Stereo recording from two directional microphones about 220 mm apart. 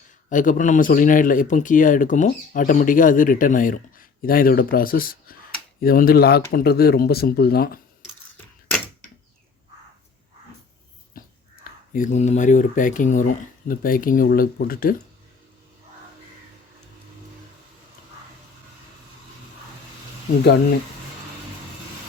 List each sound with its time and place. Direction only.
0.3 s speech: 35° left (ahead or behind)
11.1 s a sound: 40° left (ahead or behind)
11.9 s speech: 35° left (ahead or behind)